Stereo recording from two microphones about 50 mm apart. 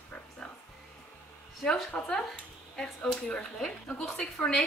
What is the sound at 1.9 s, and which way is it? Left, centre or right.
A woman's voice, left.